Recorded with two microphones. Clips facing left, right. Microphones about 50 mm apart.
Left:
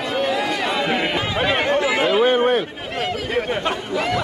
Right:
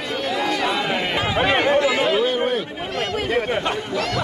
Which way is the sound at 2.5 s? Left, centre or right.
Left.